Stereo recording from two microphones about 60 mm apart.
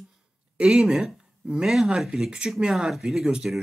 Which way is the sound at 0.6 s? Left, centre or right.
Centre.